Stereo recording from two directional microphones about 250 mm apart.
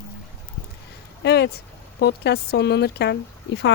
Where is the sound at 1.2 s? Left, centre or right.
Left.